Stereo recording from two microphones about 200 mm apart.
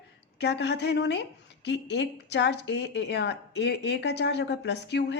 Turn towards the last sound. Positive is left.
turn(degrees=60)  # may be behind; listen again after turning